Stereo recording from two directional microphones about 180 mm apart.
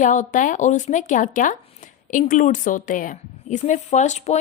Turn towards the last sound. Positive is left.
turn(degrees=40)  # may be behind; listen again after turning